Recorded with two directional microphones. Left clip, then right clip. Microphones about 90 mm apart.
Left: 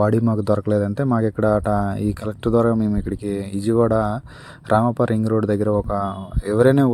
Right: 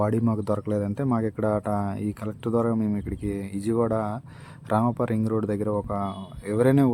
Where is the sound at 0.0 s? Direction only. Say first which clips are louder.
Left 6 dB; 50° left (ahead or behind).